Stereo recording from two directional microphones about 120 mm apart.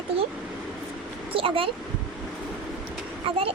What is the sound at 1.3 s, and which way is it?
Speech, 50° right (ahead or behind).